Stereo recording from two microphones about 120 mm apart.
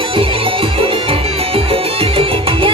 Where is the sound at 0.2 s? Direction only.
50° right (ahead or behind).